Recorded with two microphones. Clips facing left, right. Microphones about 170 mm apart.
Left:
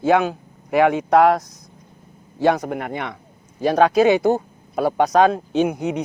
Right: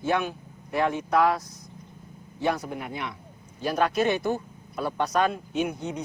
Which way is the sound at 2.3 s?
85° left.